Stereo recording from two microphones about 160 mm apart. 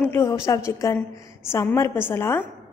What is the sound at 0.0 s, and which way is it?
A woman's voice, 15° left (ahead or behind).